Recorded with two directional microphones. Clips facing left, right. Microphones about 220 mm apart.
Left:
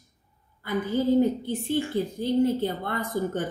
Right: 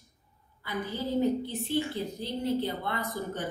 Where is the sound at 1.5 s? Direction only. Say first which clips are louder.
Left 4 dB; 50° left (ahead or behind).